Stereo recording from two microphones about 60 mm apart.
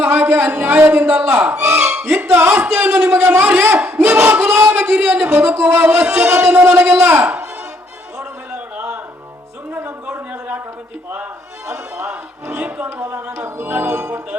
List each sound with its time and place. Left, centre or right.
0.0 s speech: right
1.6 s a sound: centre
2.1 s a sound: right
3.9 s battle cry: centre
4.4 s crowd: right
4.8 s a sound: right
5.1 s speech: centre
5.4 s speech: right
6.1 s speech: centre
6.6 s speech: right
8.2 s a sound: centre
12.6 s speech: right
13.8 s speech: right